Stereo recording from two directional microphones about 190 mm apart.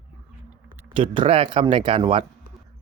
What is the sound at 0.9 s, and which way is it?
Speech, 25° right (ahead or behind).